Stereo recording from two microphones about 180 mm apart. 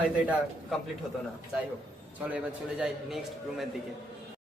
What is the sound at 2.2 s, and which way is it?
Speech, 10° right (ahead or behind).